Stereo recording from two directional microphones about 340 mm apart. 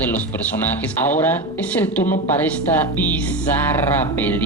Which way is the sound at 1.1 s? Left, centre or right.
Centre.